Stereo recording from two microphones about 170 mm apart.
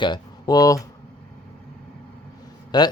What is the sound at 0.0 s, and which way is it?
Speech, 25° left (ahead or behind).